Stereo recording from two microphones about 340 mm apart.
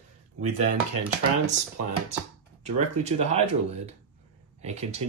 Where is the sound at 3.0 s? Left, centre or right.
Centre.